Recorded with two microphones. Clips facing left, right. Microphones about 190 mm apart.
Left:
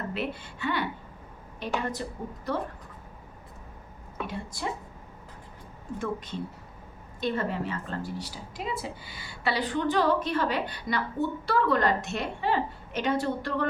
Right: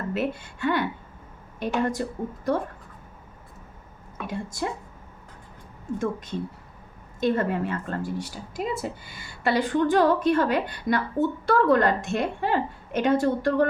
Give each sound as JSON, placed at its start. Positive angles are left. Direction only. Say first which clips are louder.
{"t": 0.1, "sound": "a woman's voice", "louder": "right 5 dB", "side_deg": -50}
{"t": 4.3, "sound": "a woman's voice", "louder": "right 6 dB", "side_deg": -50}
{"t": 7.2, "sound": "a woman's voice", "louder": "right 6 dB", "side_deg": -50}